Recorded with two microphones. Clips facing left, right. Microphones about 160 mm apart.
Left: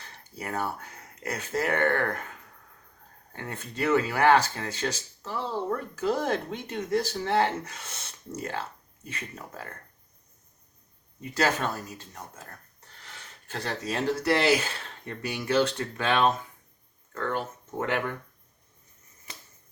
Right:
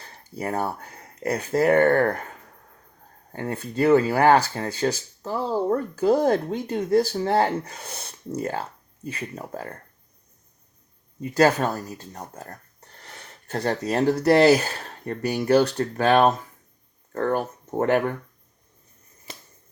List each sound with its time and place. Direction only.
0.0 s speech: 35° right (ahead or behind)
3.3 s speech: 35° right (ahead or behind)
11.2 s speech: 35° right (ahead or behind)